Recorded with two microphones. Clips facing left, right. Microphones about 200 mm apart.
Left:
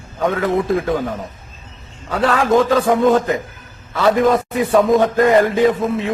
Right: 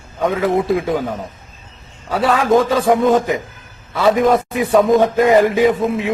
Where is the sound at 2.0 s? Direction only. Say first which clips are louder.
Right 1 dB; centre (ahead or behind).